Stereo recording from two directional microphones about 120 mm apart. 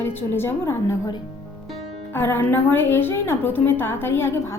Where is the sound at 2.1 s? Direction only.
20° left (ahead or behind).